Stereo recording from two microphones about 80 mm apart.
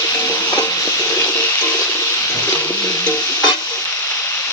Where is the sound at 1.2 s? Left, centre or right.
Left.